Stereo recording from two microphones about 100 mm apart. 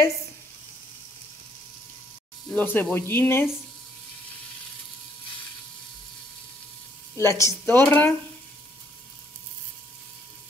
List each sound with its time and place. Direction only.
2.5 s speech: 20° left (ahead or behind)
7.2 s speech: 30° left (ahead or behind)